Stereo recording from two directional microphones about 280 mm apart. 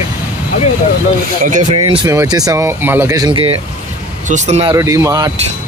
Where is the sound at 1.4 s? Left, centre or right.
Right.